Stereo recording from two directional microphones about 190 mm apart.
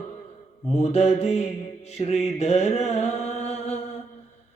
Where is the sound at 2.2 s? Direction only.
35° left (ahead or behind).